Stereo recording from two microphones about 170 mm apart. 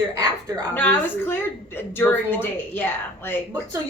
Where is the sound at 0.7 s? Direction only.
10° left (ahead or behind).